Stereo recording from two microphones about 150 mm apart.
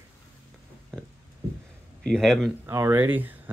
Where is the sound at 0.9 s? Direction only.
5° left (ahead or behind).